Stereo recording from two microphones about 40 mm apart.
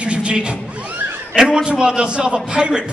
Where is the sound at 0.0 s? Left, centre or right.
Right.